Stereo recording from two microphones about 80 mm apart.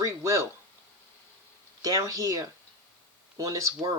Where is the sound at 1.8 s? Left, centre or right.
Right.